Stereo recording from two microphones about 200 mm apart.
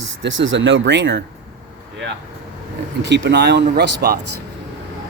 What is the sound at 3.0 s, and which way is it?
Speech, 60° right (ahead or behind).